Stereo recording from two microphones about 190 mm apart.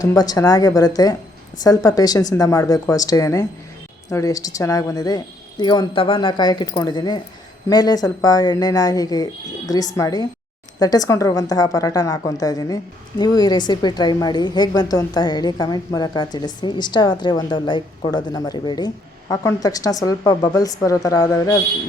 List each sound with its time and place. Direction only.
0.0 s a woman's voice: 20° left (ahead or behind)